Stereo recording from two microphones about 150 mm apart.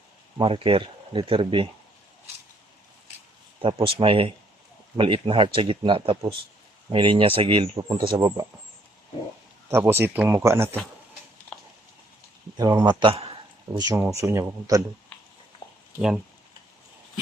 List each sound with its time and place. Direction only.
0.3 s speech: 35° right (ahead or behind)
3.6 s speech: 35° right (ahead or behind)
9.6 s speech: 15° right (ahead or behind)
12.5 s speech: 25° right (ahead or behind)
13.7 s speech: 20° right (ahead or behind)
16.0 s speech: 5° right (ahead or behind)